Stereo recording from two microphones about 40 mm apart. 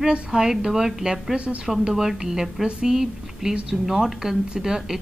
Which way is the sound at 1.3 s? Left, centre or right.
Right.